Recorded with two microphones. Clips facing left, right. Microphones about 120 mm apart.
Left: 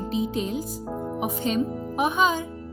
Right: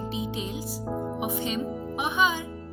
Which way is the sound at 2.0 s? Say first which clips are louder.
Left 4 dB; 45° left (ahead or behind).